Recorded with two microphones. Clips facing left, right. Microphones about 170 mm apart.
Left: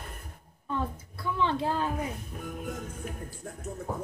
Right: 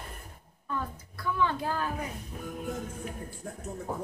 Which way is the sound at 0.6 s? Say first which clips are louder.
Left 3 dB; 25° left (ahead or behind).